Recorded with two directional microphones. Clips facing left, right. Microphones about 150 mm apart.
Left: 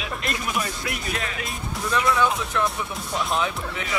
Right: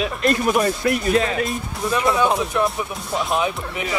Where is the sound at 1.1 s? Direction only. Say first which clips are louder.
Right 12 dB; 30° right (ahead or behind).